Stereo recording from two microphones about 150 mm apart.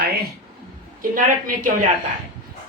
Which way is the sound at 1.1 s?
65° right (ahead or behind).